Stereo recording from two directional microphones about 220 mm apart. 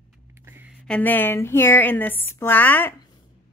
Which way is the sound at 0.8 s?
5° left (ahead or behind).